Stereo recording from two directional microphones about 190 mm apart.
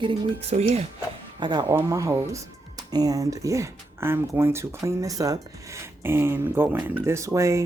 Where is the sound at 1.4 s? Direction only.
20° right (ahead or behind).